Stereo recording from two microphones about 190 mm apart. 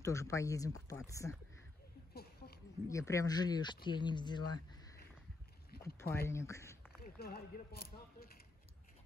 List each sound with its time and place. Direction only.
0.0 s speech: 15° left (ahead or behind)
2.1 s a sound: 55° left (ahead or behind)
2.9 s speech: 15° left (ahead or behind)
5.9 s speech: 15° left (ahead or behind)
7.0 s speech: 55° left (ahead or behind)